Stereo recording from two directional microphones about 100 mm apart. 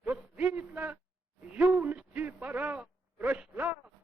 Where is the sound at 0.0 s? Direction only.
15° right (ahead or behind).